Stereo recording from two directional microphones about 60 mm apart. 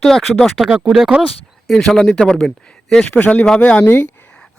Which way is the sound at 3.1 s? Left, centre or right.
Left.